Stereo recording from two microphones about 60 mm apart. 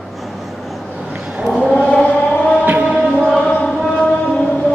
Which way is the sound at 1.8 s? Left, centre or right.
Centre.